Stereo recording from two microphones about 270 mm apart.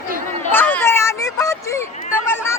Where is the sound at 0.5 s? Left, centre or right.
Centre.